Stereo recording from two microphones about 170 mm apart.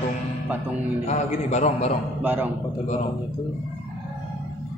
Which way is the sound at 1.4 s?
40° left (ahead or behind).